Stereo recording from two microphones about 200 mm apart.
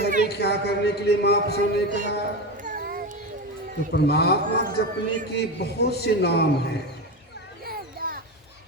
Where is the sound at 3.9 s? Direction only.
55° left (ahead or behind).